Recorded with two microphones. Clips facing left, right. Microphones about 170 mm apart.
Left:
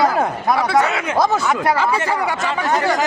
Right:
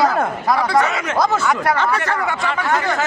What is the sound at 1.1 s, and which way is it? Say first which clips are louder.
Speech: left 1 dB; 15° left (ahead or behind).